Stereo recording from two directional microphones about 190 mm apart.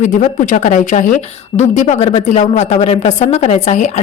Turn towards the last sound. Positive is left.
turn(degrees=40)  # may be behind; listen again after turning